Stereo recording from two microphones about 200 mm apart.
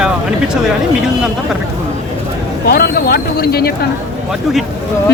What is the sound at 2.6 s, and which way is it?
A man's voice, 50° left (ahead or behind).